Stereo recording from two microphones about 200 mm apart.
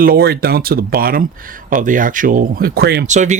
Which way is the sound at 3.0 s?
35° right (ahead or behind).